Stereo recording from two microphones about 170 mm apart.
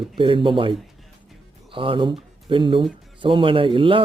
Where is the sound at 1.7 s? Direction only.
30° right (ahead or behind).